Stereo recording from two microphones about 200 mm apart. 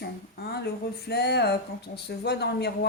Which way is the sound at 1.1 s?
55° left (ahead or behind).